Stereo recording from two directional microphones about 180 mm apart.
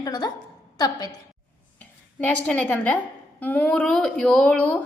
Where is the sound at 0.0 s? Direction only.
20° left (ahead or behind).